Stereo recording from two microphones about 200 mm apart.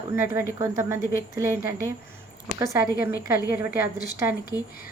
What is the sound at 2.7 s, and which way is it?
Speech, 10° right (ahead or behind).